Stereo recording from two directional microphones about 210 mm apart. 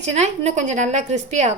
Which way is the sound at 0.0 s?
30° right (ahead or behind).